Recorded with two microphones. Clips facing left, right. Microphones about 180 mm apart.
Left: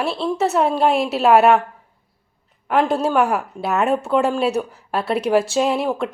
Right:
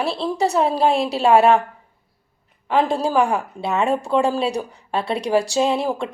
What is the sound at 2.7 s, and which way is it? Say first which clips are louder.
A woman's voice: left 1 dB; centre (ahead or behind).